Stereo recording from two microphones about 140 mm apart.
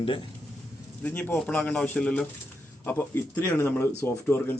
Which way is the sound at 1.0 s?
10° left (ahead or behind).